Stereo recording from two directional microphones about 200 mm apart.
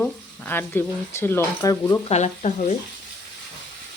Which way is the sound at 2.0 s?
35° left (ahead or behind).